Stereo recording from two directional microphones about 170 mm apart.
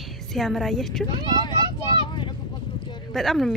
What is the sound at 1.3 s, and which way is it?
Vehicle, 25° left (ahead or behind).